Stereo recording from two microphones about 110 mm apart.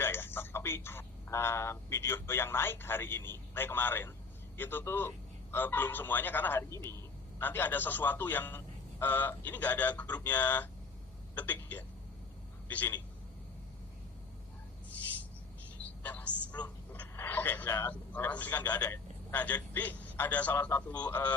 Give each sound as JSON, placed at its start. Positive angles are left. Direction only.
{"t": 0.0, "sound": "a man's voice", "side_deg": 20}
{"t": 15.8, "sound": "a sound", "side_deg": 15}
{"t": 16.6, "sound": "speech", "side_deg": 15}